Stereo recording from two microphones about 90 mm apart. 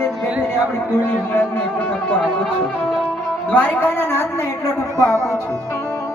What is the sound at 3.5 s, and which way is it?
Speech, 15° left (ahead or behind).